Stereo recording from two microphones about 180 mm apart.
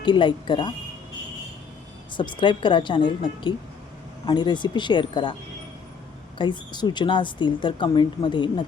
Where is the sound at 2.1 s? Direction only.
25° left (ahead or behind).